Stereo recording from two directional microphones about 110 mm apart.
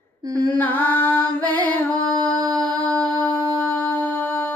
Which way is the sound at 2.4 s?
40° right (ahead or behind).